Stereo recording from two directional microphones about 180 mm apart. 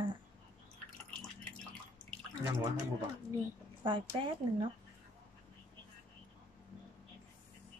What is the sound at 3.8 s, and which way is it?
Speech, 25° right (ahead or behind).